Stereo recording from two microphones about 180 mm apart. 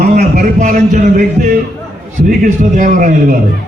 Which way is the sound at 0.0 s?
60° right (ahead or behind).